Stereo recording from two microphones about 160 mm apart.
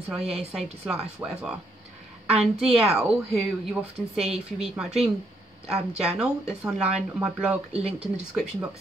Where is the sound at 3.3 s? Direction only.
Centre (ahead or behind).